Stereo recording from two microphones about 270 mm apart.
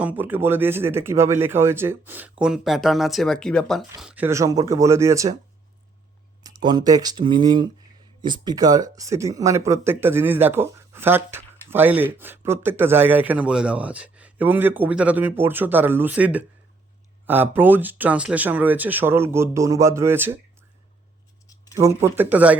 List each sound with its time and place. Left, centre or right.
0.0 s speech: centre
6.4 s speech: centre
21.4 s a sound: centre
21.8 s speech: centre